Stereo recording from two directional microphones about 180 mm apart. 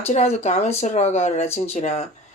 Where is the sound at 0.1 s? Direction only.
40° left (ahead or behind).